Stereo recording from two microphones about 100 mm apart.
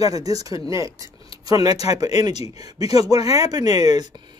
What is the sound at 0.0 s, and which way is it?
Speech, 35° right (ahead or behind).